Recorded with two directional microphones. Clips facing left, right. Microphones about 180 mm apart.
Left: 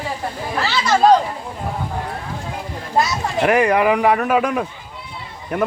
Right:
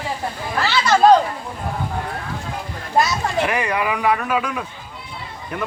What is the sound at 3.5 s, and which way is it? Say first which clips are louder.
A man's voice: left 7 dB; 45° left (ahead or behind).